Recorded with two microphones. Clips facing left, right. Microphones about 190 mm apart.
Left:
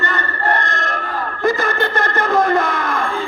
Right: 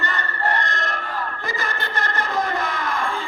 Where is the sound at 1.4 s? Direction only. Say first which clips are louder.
Left 11 dB; 50° left (ahead or behind).